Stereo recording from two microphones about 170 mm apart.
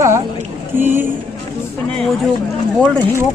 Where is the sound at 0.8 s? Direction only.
10° right (ahead or behind).